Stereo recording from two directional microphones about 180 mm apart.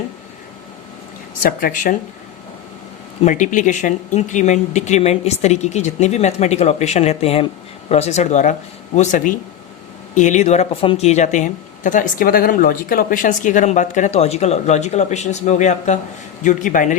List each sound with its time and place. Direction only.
1.4 s speech: 50° left (ahead or behind)
3.2 s speech: 45° left (ahead or behind)